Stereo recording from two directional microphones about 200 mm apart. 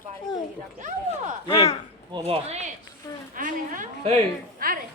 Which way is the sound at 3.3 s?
40° right (ahead or behind).